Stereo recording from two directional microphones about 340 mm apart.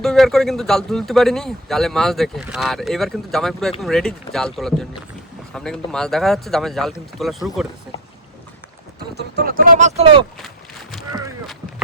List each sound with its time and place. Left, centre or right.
0.0 s speech: centre
9.1 s speech: right